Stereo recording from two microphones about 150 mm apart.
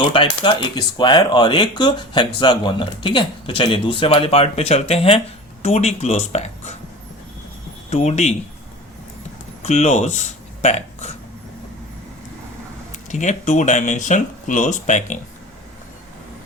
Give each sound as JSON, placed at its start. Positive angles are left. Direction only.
{"t": 0.1, "sound": "speech", "side_deg": 30}
{"t": 7.9, "sound": "speech", "side_deg": 50}
{"t": 9.6, "sound": "speech", "side_deg": 50}
{"t": 13.1, "sound": "speech", "side_deg": 55}